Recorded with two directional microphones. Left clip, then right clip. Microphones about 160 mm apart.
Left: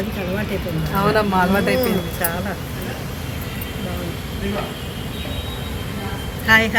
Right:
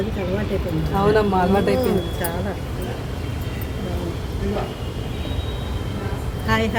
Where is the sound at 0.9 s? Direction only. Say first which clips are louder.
Left 1 dB; 10° left (ahead or behind).